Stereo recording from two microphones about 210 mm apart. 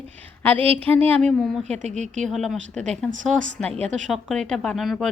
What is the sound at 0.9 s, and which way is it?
Speech, 10° left (ahead or behind).